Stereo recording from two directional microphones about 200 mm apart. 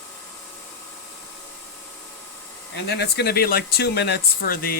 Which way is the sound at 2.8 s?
55° left (ahead or behind).